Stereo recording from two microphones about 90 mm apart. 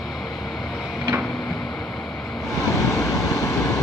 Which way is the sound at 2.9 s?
35° left (ahead or behind).